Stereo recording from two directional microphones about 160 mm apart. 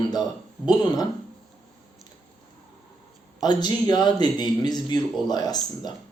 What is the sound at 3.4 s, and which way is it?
Speech, 25° left (ahead or behind).